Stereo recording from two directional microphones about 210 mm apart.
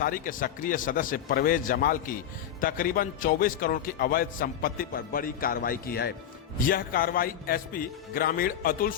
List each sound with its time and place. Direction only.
0.0 s a man's voice: 40° left (ahead or behind)